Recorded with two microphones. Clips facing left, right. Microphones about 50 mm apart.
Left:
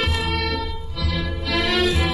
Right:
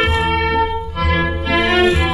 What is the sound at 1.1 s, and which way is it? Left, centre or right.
Music, right.